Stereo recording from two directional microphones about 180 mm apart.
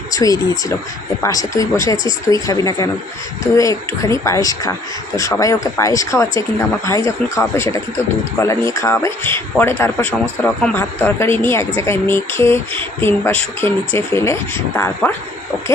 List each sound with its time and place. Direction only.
0.1 s speech: 20° left (ahead or behind)